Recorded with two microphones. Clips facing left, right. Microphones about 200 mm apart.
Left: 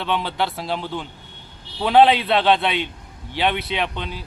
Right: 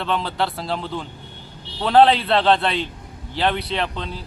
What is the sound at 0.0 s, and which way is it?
Speech, centre (ahead or behind).